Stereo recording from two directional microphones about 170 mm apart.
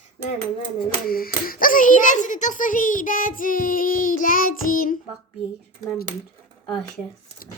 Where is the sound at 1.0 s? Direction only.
60° left (ahead or behind).